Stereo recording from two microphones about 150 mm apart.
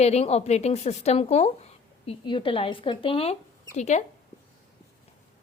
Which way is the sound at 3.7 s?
50° left (ahead or behind).